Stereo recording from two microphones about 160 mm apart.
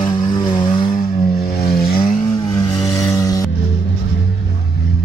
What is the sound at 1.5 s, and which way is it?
Vehicle, 75° left (ahead or behind).